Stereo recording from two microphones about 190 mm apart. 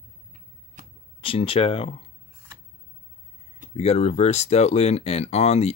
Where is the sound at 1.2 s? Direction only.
30° left (ahead or behind).